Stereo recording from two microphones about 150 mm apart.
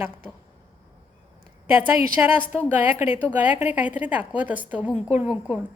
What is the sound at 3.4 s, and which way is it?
A woman's voice, 10° right (ahead or behind).